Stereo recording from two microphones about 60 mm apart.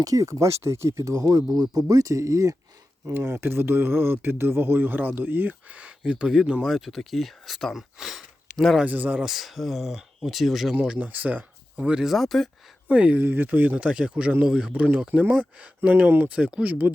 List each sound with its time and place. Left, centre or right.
0.0 s speech: right
3.1 s speech: right; by 8.8 s centre
8.8 s speech: right
9.2 s speech: centre
10.8 s speech: centre
11.8 s speech: centre
12.0 s speech: centre
12.9 s speech: right
13.2 s speech: right
16.3 s speech: centre